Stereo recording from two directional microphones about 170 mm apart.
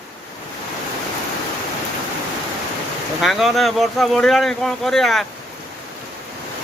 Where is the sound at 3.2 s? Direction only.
Centre (ahead or behind).